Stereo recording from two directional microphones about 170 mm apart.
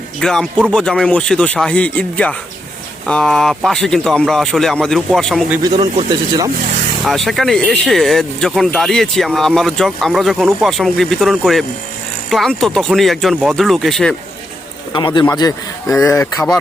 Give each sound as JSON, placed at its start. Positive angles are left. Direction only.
{"t": 0.2, "sound": "speech", "side_deg": 5}
{"t": 5.7, "sound": "speech", "side_deg": -30}
{"t": 7.0, "sound": "speech", "side_deg": 0}
{"t": 14.9, "sound": "a man's voice", "side_deg": 30}